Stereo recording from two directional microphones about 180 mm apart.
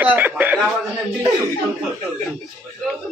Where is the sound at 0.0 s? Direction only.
10° right (ahead or behind).